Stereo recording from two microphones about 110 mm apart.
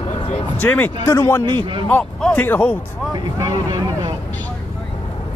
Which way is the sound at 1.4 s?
45° right (ahead or behind).